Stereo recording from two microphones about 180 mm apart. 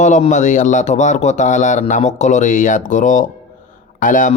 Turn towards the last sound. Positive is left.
turn(degrees=45)  # may be behind; listen again after turning